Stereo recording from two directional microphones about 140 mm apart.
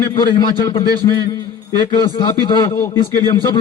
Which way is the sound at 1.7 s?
30° left (ahead or behind).